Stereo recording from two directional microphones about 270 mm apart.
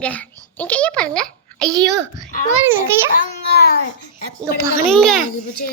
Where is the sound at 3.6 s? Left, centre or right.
Left.